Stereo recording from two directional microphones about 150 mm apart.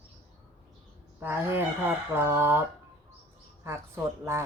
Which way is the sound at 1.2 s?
15° right (ahead or behind).